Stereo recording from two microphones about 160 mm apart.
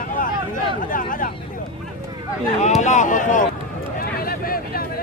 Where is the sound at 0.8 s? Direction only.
60° left (ahead or behind).